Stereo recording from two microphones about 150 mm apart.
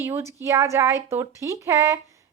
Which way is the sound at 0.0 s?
20° right (ahead or behind).